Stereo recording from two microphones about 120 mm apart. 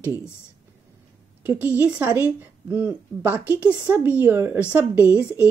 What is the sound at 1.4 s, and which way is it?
A woman's voice, 15° right (ahead or behind).